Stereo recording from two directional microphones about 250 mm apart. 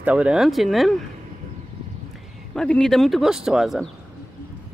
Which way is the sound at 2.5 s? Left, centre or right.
Centre.